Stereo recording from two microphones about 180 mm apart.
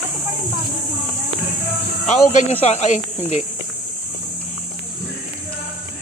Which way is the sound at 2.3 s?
35° left (ahead or behind).